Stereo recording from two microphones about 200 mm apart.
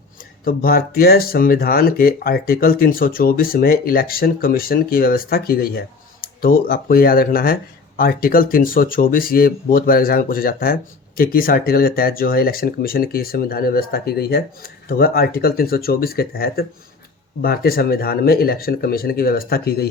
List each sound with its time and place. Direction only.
0.4 s speech: 45° left (ahead or behind)